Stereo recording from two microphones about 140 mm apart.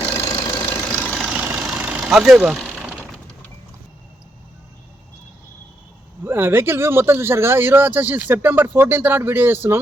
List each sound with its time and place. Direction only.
0.0 s engine knocking: 35° left (ahead or behind)
0.7 s engine knocking: 10° left (ahead or behind)
1.4 s vehicle: 10° right (ahead or behind)
6.2 s speech: 15° right (ahead or behind)